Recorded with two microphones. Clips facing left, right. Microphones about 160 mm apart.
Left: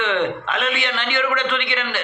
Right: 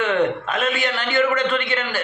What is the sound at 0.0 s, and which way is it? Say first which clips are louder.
A man's voice: right 2 dB; 40° right (ahead or behind).